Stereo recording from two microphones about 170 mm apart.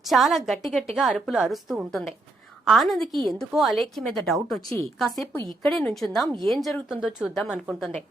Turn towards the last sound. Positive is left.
turn(degrees=-5)  # may be behind; listen again after turning